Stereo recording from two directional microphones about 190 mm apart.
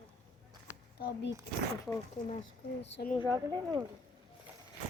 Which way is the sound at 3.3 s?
20° right (ahead or behind).